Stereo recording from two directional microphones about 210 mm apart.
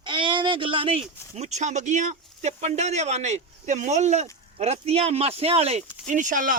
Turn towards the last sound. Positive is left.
turn(degrees=-40)  # may be behind; listen again after turning